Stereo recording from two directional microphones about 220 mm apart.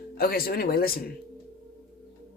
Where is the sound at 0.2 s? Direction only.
45° left (ahead or behind).